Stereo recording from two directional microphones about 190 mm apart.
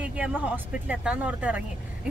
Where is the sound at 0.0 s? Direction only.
5° right (ahead or behind).